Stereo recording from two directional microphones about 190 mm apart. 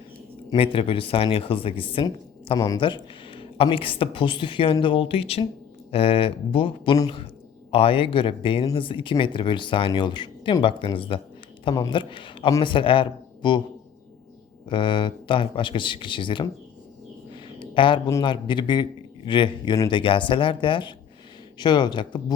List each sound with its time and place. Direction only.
0.5 s speech: 30° left (ahead or behind)
14.7 s speech: 25° left (ahead or behind)
17.7 s speech: 25° left (ahead or behind)